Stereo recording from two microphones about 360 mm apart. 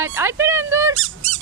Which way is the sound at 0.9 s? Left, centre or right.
Right.